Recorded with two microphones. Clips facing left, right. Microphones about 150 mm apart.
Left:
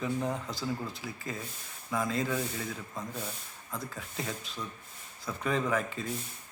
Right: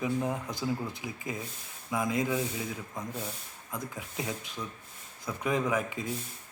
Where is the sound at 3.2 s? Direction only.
10° right (ahead or behind).